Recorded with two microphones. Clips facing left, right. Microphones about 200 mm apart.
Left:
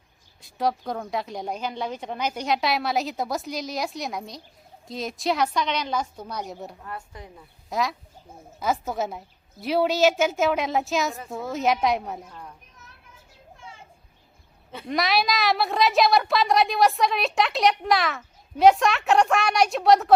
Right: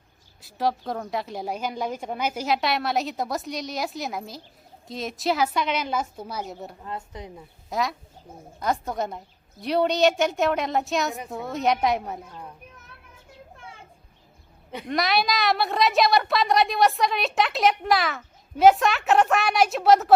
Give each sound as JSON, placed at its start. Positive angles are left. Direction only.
{"t": 0.4, "sound": "a woman's voice", "side_deg": 0}
{"t": 6.8, "sound": "a woman's voice", "side_deg": -20}
{"t": 7.7, "sound": "a woman's voice", "side_deg": 0}
{"t": 14.8, "sound": "a woman's voice", "side_deg": 0}